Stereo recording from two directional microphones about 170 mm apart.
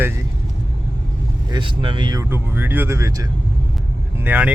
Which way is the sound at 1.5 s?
30° right (ahead or behind).